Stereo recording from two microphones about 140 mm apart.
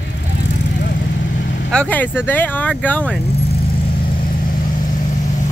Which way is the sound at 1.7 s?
10° left (ahead or behind).